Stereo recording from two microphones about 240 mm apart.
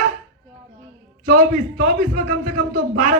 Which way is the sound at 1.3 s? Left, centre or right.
Right.